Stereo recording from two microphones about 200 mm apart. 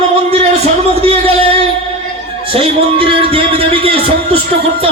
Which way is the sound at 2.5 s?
25° right (ahead or behind).